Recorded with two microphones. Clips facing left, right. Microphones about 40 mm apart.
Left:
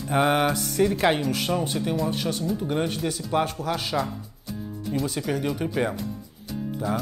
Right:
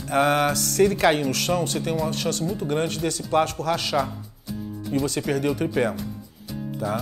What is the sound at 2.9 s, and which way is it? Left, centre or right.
Speech, centre.